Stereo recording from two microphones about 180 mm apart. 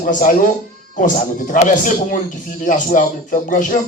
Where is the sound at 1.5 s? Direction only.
45° left (ahead or behind).